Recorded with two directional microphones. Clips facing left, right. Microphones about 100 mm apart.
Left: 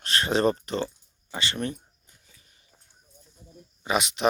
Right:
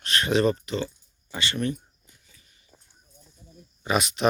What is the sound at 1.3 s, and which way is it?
Speech, 25° left (ahead or behind).